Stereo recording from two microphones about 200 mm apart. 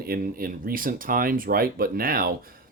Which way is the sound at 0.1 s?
45° right (ahead or behind).